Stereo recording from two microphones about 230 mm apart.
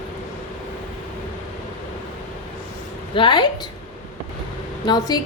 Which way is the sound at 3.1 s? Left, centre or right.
Centre.